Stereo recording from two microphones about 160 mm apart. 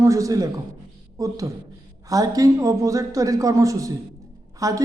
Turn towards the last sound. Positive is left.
turn(degrees=-20)  # may be behind; listen again after turning